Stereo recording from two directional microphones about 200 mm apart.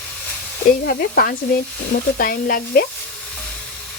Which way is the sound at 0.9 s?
45° left (ahead or behind).